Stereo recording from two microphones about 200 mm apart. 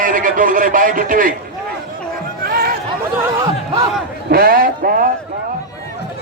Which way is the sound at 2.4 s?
50° right (ahead or behind).